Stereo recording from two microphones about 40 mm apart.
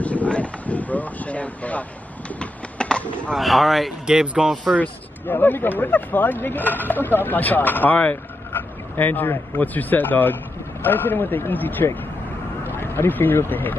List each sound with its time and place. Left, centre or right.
0.0 s a sound: left
2.3 s a sound: left
3.3 s speech: centre
4.0 s speech: right
5.2 s a man's voice: left
12.6 s speech: left